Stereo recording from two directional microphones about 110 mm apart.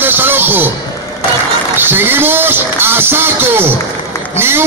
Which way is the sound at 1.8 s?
20° right (ahead or behind).